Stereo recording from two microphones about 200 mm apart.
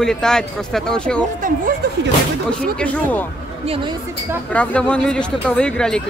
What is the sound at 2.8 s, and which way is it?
Speech, 10° left (ahead or behind).